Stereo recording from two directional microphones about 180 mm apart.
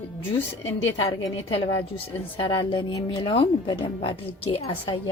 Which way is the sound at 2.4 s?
25° left (ahead or behind).